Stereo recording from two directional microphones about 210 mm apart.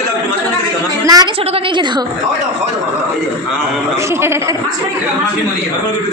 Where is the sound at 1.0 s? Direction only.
20° right (ahead or behind).